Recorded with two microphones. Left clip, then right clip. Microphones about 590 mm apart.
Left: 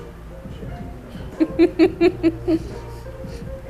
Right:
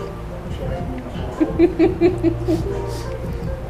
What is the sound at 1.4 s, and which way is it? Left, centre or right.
Speech, left.